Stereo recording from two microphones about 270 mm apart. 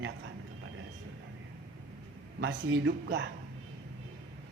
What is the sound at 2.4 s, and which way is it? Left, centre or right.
Speech, right.